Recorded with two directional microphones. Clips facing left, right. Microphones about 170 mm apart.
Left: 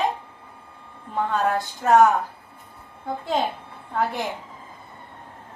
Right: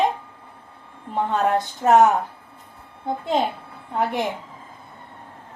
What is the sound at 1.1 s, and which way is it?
Speech, 25° right (ahead or behind).